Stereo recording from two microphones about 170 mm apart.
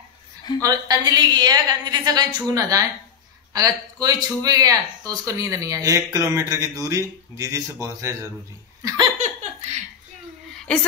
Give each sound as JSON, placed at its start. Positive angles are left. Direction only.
{"t": 0.6, "sound": "speech", "side_deg": -20}
{"t": 8.8, "sound": "laughter", "side_deg": -20}
{"t": 9.2, "sound": "laughter", "side_deg": -40}
{"t": 10.5, "sound": "a sound", "side_deg": 5}